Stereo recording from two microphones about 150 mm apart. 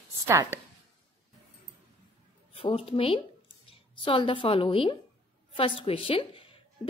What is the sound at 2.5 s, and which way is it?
A woman's voice, 40° left (ahead or behind).